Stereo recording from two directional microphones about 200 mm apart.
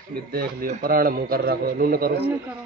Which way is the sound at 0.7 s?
45° right (ahead or behind).